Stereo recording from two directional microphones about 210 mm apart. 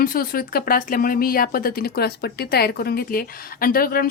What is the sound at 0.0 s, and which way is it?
Speech, 45° left (ahead or behind).